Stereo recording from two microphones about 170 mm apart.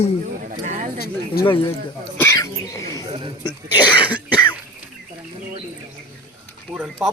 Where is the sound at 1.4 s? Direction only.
65° left (ahead or behind).